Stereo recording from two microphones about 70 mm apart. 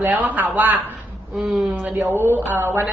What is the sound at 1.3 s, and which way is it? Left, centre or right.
A woman's voice, centre.